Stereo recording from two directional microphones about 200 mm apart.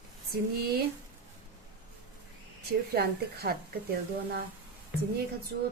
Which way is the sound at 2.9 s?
50° right (ahead or behind).